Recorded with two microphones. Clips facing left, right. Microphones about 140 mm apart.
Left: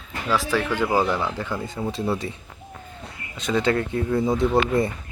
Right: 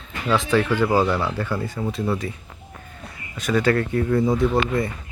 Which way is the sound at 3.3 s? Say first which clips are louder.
Right 2 dB; 20° left (ahead or behind).